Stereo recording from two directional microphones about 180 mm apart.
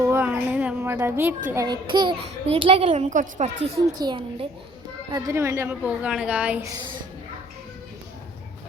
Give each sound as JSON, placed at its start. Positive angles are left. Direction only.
{"t": 0.0, "sound": "a sound", "side_deg": -10}
{"t": 1.6, "sound": "a child's voice", "side_deg": -25}
{"t": 3.8, "sound": "a child's voice", "side_deg": -25}